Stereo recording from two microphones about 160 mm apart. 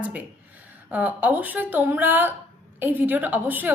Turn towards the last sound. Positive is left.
turn(degrees=-10)  # may be behind; listen again after turning